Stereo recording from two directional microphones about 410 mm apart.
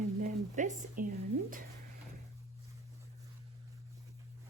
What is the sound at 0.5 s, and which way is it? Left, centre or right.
Speech, centre.